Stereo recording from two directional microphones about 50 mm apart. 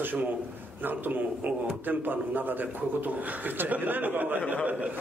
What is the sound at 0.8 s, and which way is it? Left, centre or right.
A man's voice, right.